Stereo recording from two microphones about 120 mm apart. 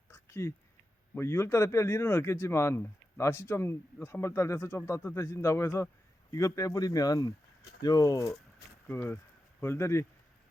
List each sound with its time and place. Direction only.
0.1 s a sound: 20° left (ahead or behind)
1.1 s speech: 20° left (ahead or behind)
8.9 s speech: 20° left (ahead or behind)